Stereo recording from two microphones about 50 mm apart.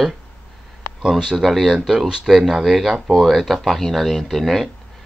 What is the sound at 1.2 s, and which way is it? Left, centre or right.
Speech, centre.